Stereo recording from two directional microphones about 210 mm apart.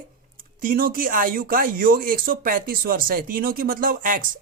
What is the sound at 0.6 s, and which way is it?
Speech, 45° right (ahead or behind).